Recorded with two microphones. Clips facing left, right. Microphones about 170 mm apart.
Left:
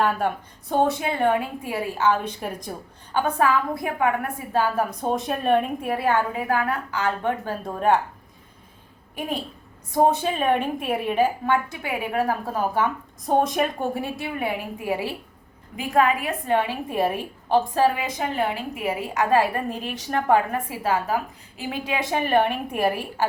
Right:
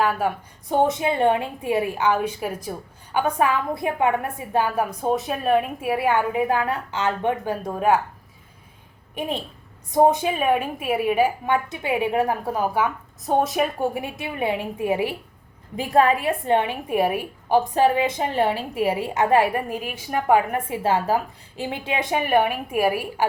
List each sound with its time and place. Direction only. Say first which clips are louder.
0.0 s a woman's voice: even; 5° right (ahead or behind)
0.7 s a woman's voice: right 2 dB; 20° right (ahead or behind)
4.9 s a woman's voice: right 1 dB; 5° right (ahead or behind)
9.9 s a woman's voice: right 2 dB; 15° right (ahead or behind)
15.7 s a woman's voice: right 2 dB; 35° right (ahead or behind); by 23.2 s 10° right (ahead or behind)